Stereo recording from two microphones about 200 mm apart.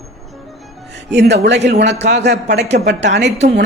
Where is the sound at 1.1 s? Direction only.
60° right (ahead or behind).